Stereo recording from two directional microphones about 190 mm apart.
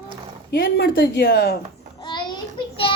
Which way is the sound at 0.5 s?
55° left (ahead or behind).